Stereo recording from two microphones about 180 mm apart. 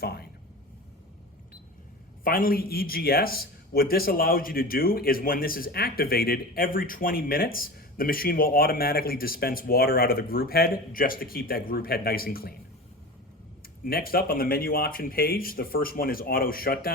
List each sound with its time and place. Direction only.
0.0 s a sound: 60° left (ahead or behind)
2.2 s a man's voice: 55° left (ahead or behind)
13.8 s a man's voice: 55° left (ahead or behind)